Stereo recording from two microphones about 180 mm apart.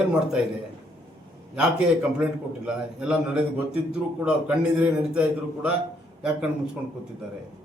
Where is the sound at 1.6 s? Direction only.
5° right (ahead or behind).